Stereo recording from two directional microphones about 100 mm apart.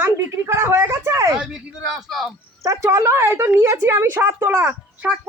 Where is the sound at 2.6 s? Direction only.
30° right (ahead or behind).